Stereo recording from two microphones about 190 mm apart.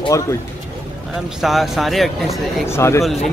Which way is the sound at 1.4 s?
Centre (ahead or behind).